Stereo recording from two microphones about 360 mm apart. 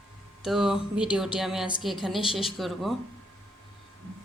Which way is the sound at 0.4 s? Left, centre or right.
Centre.